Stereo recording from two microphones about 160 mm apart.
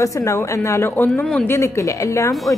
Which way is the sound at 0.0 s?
20° left (ahead or behind).